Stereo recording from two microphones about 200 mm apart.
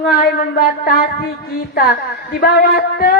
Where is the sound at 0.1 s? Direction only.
45° left (ahead or behind).